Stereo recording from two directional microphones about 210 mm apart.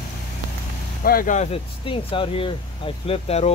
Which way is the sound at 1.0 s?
45° left (ahead or behind).